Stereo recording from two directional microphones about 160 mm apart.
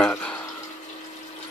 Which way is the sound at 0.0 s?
5° left (ahead or behind).